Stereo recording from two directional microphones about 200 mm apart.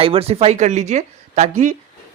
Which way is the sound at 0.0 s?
30° right (ahead or behind).